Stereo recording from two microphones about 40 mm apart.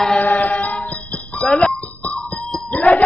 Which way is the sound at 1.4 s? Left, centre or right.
Left.